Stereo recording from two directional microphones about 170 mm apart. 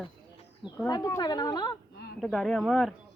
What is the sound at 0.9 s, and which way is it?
Speech, 20° left (ahead or behind).